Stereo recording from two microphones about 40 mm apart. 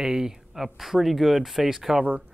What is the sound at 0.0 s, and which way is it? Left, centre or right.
Speech, centre.